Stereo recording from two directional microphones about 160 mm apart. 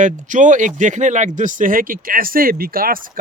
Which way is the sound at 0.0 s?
50° right (ahead or behind).